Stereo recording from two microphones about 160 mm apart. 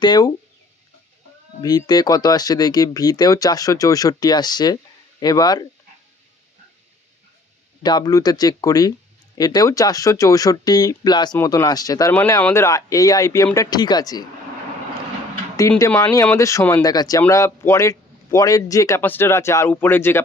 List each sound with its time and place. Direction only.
0.0 s speech: 25° left (ahead or behind)
1.6 s speech: 25° left (ahead or behind)
7.8 s speech: 25° left (ahead or behind)
16.2 s speech: 15° left (ahead or behind)